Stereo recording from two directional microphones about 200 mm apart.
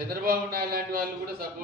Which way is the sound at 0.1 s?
50° right (ahead or behind).